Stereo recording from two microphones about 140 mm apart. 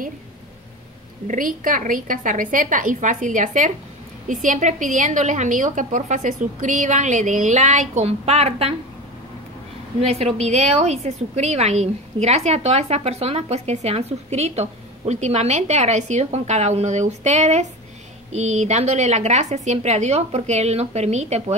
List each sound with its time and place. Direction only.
1.2 s a woman's voice: 70° right (ahead or behind); by 8.7 s 50° right (ahead or behind)
9.9 s a woman's voice: 45° right (ahead or behind)